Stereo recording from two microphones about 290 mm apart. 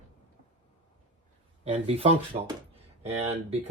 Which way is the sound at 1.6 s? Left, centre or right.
Right.